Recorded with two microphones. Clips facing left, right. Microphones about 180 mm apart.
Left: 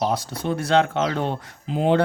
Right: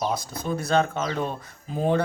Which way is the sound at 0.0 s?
70° left (ahead or behind).